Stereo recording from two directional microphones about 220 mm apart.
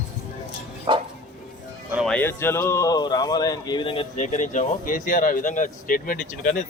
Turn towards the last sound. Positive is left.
turn(degrees=40)  # may be behind; listen again after turning